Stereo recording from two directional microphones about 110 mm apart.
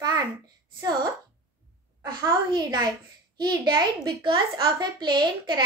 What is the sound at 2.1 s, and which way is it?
A child's voice, 35° right (ahead or behind).